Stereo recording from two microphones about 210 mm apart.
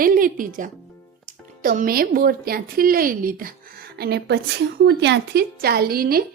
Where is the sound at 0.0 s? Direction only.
40° right (ahead or behind).